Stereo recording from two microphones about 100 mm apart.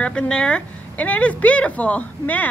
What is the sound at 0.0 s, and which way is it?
A woman's voice, 10° left (ahead or behind).